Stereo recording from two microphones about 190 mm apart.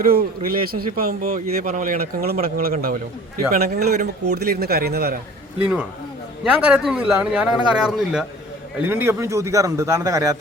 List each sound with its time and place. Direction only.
0.0 s a man's voice: 50° right (ahead or behind)
5.5 s a man's voice: 10° right (ahead or behind)